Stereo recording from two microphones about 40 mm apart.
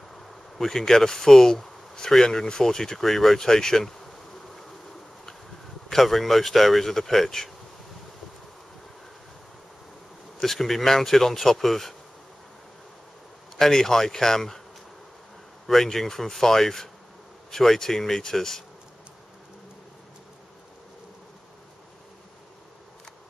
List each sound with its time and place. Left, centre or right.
0.3 s speech: centre
5.9 s speech: centre
10.3 s speech: centre
13.6 s speech: centre
15.6 s speech: centre